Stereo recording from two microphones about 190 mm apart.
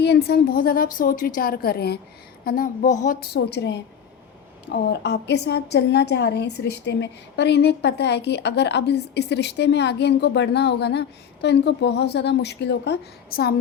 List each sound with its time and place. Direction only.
0.0 s a woman's voice: 60° left (ahead or behind)